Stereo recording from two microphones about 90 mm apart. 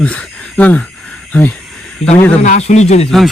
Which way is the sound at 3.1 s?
Centre (ahead or behind).